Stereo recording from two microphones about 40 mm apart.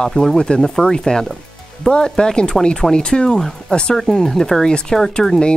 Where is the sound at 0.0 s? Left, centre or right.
Centre.